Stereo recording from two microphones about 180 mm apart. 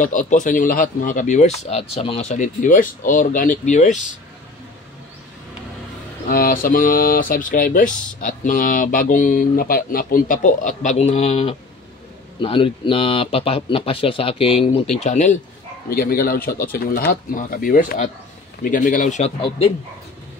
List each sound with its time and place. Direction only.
0.0 s speech: 45° left (ahead or behind)
6.2 s speech: 50° left (ahead or behind)
15.9 s speech: 55° left (ahead or behind); by 19.3 s 40° left (ahead or behind)